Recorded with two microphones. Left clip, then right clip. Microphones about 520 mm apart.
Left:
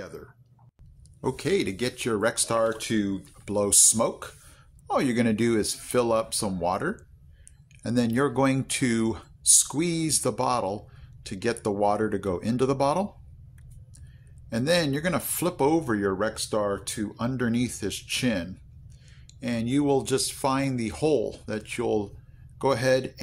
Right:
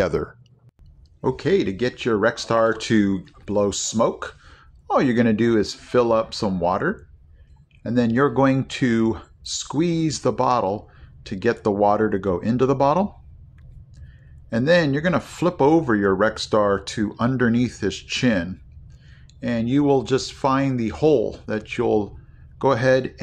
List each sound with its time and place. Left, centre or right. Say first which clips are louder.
0.0 s speech: right 19 dB; centre
1.2 s speech: right 6 dB; left
14.5 s speech: right 6 dB; left